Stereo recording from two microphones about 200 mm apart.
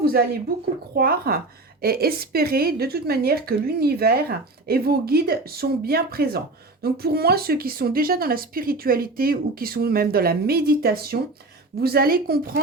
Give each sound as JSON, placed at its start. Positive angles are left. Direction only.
{"t": 0.9, "sound": "a woman's voice", "side_deg": -50}